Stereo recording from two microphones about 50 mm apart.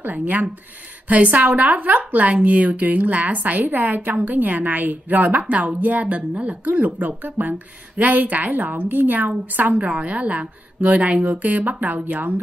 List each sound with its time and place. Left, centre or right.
0.0 s a woman's voice: right